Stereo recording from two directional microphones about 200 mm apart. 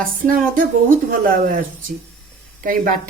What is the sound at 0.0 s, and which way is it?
A woman's voice, 45° right (ahead or behind).